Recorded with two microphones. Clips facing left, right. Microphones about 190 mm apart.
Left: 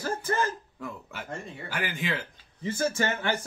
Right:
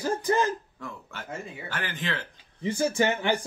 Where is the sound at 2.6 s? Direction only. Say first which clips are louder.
Right 3 dB; 15° right (ahead or behind).